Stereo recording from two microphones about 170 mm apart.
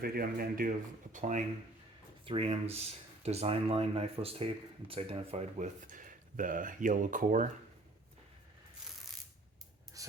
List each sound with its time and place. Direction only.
0.0 s speech: 65° right (ahead or behind); by 1.5 s 45° right (ahead or behind)
2.2 s speech: 35° right (ahead or behind); by 7.5 s 50° right (ahead or behind)
10.0 s a sound: 20° right (ahead or behind)